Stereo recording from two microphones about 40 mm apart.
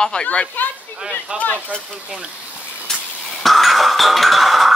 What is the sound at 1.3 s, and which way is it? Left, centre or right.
Speech, right.